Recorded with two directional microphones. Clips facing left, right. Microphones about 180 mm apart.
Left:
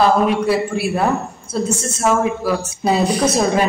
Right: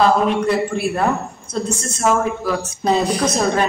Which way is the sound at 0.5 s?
Centre (ahead or behind).